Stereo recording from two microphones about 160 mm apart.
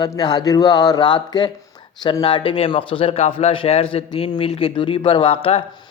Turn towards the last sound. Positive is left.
turn(degrees=35)  # may be behind; listen again after turning